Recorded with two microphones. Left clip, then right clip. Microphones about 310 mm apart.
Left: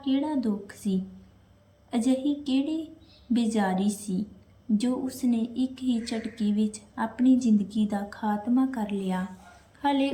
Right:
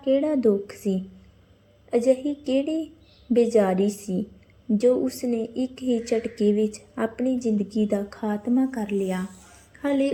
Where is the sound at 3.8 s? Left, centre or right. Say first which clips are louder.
Right 6 dB; centre.